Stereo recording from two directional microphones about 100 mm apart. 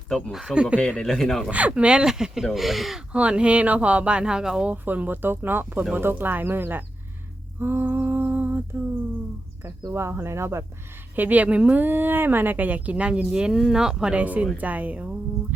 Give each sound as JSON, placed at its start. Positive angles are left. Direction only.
{"t": 0.3, "sound": "a woman's voice", "side_deg": -5}
{"t": 0.8, "sound": "speech", "side_deg": 10}
{"t": 1.5, "sound": "a woman's voice", "side_deg": -15}
{"t": 4.7, "sound": "speech", "side_deg": -15}
{"t": 7.6, "sound": "humming", "side_deg": -20}
{"t": 9.9, "sound": "a woman's voice", "side_deg": -25}